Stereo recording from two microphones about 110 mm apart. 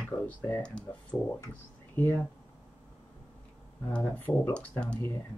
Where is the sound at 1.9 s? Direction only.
15° left (ahead or behind).